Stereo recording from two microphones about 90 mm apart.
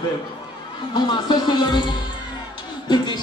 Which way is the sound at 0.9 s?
55° left (ahead or behind).